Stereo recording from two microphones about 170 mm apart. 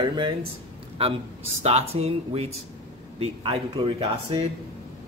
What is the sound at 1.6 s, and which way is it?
Speech, 40° right (ahead or behind).